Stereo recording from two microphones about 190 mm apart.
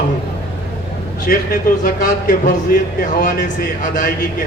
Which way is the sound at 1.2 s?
45° left (ahead or behind).